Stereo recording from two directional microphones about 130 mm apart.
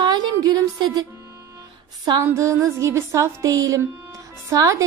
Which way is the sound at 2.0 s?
25° right (ahead or behind).